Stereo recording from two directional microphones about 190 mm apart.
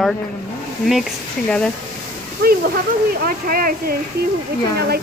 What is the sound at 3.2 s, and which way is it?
Speech, 50° right (ahead or behind).